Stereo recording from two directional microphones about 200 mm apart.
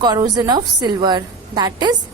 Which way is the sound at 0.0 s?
20° right (ahead or behind).